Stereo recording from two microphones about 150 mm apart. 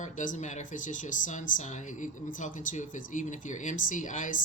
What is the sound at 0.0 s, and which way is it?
Speech, 55° left (ahead or behind).